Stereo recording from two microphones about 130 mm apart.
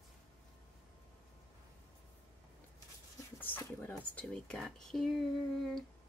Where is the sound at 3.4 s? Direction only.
15° left (ahead or behind).